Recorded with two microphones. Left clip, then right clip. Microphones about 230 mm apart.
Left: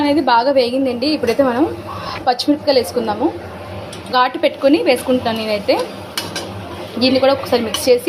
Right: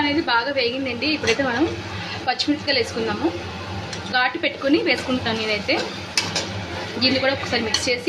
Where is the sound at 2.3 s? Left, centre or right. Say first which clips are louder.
Left 7 dB; centre.